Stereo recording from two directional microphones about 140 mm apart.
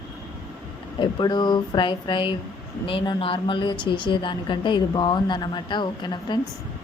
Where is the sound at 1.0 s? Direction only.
30° left (ahead or behind).